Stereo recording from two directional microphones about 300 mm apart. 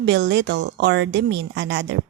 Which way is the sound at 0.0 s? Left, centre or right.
Right.